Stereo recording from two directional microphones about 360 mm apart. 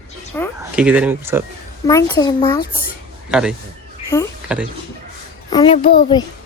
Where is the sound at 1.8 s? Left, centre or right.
Centre.